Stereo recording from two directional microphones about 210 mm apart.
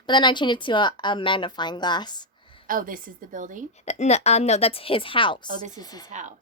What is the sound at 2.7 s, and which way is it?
Speech, 40° right (ahead or behind).